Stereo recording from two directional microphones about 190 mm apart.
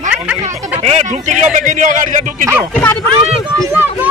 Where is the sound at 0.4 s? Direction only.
35° right (ahead or behind).